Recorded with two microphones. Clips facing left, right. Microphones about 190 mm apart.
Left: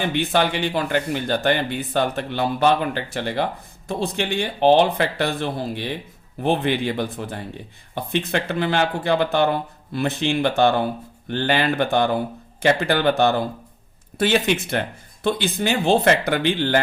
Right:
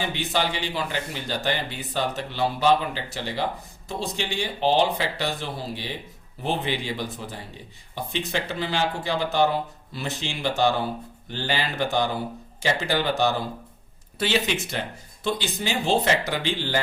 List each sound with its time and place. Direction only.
0.1 s a man's voice: 55° left (ahead or behind)